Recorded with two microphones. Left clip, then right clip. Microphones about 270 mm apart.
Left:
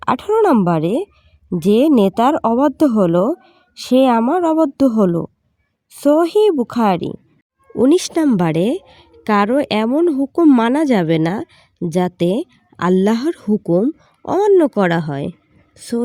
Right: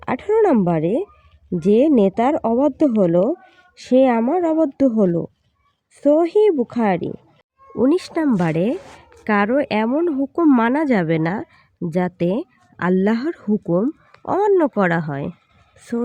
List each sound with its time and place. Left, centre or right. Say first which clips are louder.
0.0 s speech: left 3 dB; left